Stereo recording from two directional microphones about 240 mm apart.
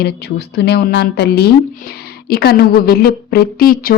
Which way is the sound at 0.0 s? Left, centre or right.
Left.